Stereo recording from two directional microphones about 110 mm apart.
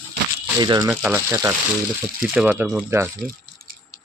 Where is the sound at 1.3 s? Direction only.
25° right (ahead or behind).